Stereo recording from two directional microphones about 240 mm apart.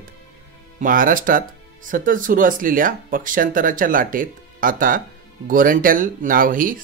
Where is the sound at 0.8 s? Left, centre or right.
Right.